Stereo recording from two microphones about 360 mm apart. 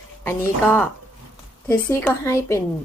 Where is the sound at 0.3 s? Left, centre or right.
Centre.